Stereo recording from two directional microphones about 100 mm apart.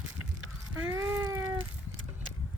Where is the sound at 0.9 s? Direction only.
25° right (ahead or behind).